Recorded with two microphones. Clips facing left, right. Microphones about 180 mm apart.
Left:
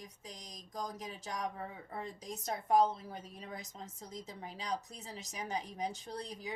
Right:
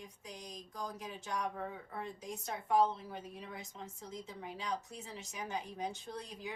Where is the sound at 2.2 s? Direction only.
40° left (ahead or behind).